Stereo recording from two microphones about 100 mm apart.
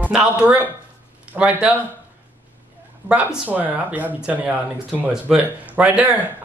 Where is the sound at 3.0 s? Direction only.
20° right (ahead or behind).